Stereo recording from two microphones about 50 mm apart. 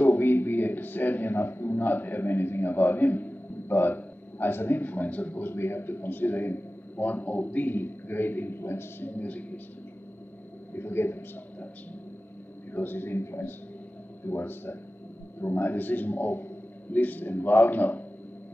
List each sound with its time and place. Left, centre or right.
0.0 s a man's voice: left
5.5 s a man's voice: left
9.1 s a man's voice: left
10.7 s a man's voice: left
12.7 s a man's voice: left